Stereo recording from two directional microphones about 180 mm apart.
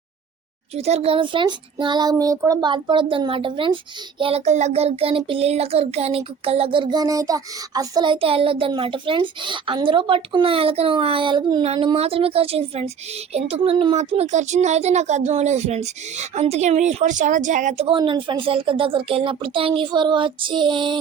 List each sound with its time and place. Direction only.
0.8 s child singing: 35° right (ahead or behind)
11.9 s speech: 30° right (ahead or behind)